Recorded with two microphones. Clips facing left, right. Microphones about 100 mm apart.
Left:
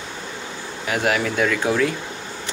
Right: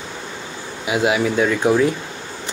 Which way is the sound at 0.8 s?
10° right (ahead or behind).